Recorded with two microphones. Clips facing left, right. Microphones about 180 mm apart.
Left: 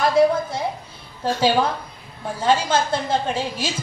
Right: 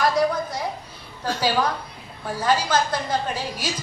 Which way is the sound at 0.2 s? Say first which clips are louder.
Left 9 dB; 25° left (ahead or behind).